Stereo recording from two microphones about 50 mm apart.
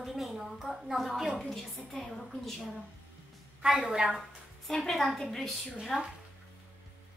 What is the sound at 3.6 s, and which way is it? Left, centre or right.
Speech, centre.